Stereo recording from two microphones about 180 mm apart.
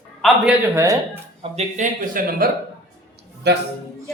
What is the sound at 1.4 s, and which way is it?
Speech, 40° right (ahead or behind).